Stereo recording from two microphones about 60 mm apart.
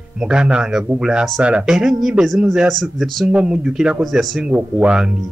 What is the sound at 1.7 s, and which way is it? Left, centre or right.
Speech, centre.